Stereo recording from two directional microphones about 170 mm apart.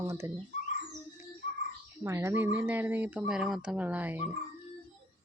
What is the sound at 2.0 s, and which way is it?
Speech, 15° right (ahead or behind).